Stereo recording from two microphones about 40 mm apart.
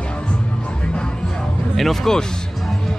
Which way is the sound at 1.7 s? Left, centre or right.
Centre.